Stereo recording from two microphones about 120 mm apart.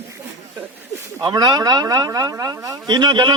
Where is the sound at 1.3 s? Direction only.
30° right (ahead or behind).